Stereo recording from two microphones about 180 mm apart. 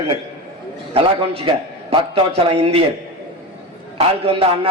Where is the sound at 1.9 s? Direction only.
35° right (ahead or behind).